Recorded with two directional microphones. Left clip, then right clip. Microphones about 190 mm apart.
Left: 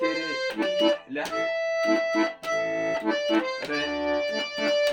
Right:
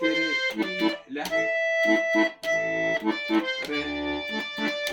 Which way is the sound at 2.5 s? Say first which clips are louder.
Right 1 dB; 15° left (ahead or behind).